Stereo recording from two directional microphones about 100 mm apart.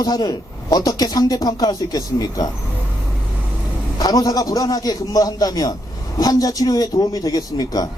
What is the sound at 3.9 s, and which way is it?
A man's voice, 40° left (ahead or behind).